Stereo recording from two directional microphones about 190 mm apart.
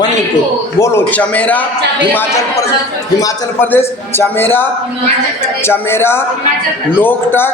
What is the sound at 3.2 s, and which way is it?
A man's voice, 15° left (ahead or behind).